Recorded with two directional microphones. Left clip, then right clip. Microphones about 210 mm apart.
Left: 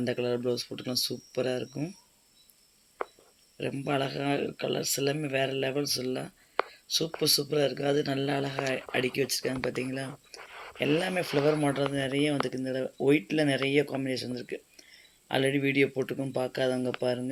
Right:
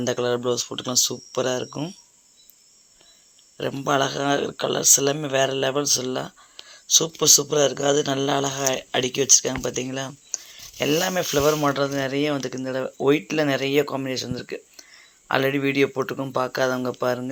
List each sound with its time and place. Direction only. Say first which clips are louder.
0.0 s speech: right 6 dB; 5° right (ahead or behind)
1.3 s speech: right 6 dB; 50° right (ahead or behind)
1.5 s speech: right 6 dB; centre (ahead or behind)
3.7 s speech: right 9 dB; 5° right (ahead or behind)
8.1 s speech: right 7 dB; 50° right (ahead or behind)
8.9 s speech: right 9 dB; centre (ahead or behind)